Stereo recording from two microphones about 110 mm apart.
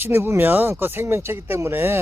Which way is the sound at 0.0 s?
25° right (ahead or behind).